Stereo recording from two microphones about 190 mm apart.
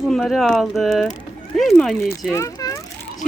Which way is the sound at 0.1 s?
Centre (ahead or behind).